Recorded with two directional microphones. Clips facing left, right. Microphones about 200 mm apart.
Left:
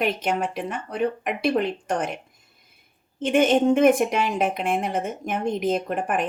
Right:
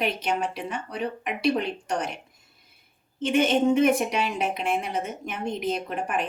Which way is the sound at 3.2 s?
50° left (ahead or behind).